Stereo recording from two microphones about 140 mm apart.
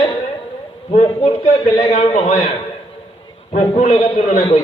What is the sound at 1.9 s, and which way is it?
Speech, 50° left (ahead or behind).